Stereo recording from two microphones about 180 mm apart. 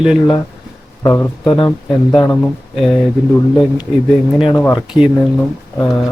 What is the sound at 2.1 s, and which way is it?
Speech, 5° left (ahead or behind).